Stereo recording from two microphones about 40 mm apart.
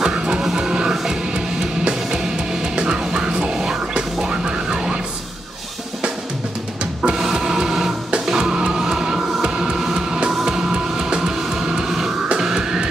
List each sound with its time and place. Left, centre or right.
0.0 s music: centre
7.0 s music: centre